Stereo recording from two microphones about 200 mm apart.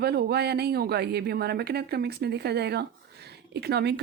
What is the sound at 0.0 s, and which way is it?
A woman's voice, 55° right (ahead or behind).